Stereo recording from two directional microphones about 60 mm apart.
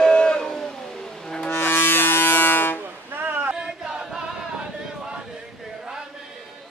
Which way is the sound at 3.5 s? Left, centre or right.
Centre.